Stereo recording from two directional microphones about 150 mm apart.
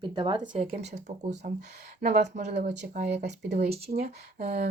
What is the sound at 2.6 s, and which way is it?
Speech, 90° right.